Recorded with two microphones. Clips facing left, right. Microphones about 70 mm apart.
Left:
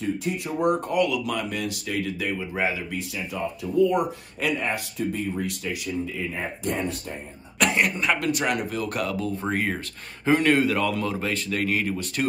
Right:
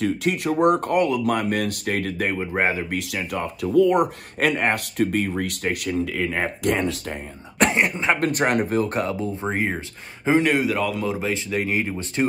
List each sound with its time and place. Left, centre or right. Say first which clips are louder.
0.0 s speech: right 5 dB; right
1.0 s speech: right 5 dB; right
3.0 s speech: right 3 dB; right
7.5 s speech: right 3 dB; right
8.2 s speech: right 4 dB; right
10.2 s speech: right 1 dB; centre